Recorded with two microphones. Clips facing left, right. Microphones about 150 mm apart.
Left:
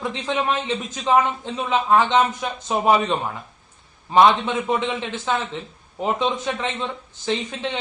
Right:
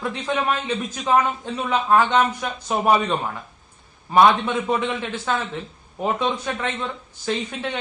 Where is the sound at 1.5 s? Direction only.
20° left (ahead or behind).